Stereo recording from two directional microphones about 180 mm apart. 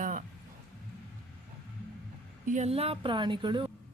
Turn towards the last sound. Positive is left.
turn(degrees=-25)  # may be behind; listen again after turning